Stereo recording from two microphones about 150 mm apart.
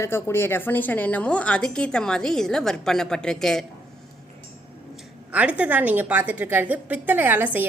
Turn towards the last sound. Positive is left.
turn(degrees=-15)  # may be behind; listen again after turning